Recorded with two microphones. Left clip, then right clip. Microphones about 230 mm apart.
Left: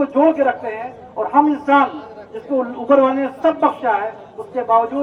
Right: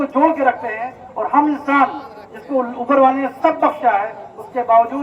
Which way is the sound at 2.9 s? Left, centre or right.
Right.